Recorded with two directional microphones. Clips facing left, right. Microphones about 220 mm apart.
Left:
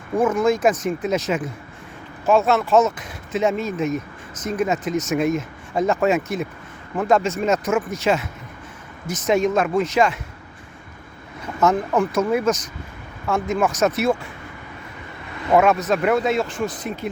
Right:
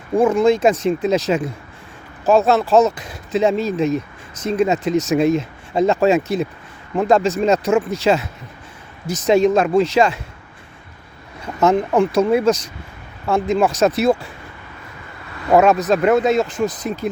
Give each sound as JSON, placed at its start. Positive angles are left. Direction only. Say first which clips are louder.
{"t": 0.2, "sound": "speech", "louder": "right 4 dB", "side_deg": -30}
{"t": 11.6, "sound": "speech", "louder": "right 4 dB", "side_deg": -30}
{"t": 15.5, "sound": "speech", "louder": "right 3 dB", "side_deg": -35}